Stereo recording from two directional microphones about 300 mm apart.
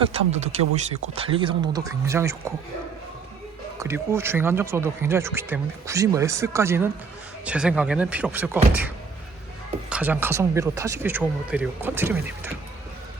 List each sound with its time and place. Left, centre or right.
0.1 s speech: right
3.8 s speech: centre
9.9 s speech: centre